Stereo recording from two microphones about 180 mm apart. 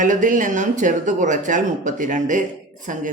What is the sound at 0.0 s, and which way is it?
Speech, 45° right (ahead or behind).